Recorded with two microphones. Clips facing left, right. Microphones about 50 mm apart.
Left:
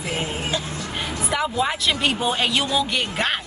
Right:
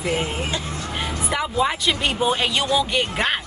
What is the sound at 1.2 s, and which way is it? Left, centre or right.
Speech, centre.